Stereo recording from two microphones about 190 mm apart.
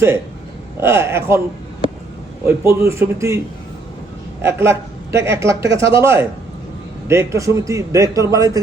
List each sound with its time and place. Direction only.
0.8 s a man's voice: 15° right (ahead or behind)
2.6 s a man's voice: 15° right (ahead or behind)
4.4 s a man's voice: 15° right (ahead or behind)